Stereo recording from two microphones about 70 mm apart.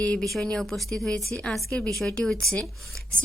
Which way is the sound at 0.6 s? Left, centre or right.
Centre.